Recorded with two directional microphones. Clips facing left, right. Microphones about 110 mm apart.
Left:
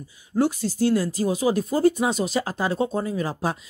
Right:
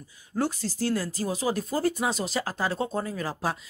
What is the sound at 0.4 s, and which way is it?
Speech, 15° left (ahead or behind).